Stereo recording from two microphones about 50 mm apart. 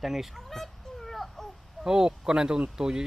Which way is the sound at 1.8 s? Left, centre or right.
Centre.